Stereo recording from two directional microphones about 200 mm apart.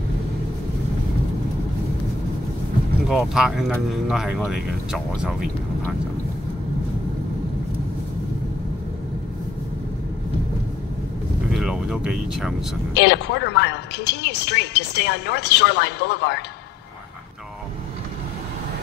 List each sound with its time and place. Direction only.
3.1 s speech: 5° right (ahead or behind)
11.5 s speech: 5° right (ahead or behind)
13.0 s speech: 55° left (ahead or behind)